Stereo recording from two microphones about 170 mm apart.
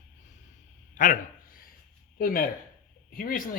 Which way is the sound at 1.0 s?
50° left (ahead or behind).